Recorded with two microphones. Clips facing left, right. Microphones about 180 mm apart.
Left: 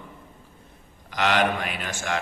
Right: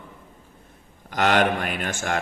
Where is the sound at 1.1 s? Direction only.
45° right (ahead or behind).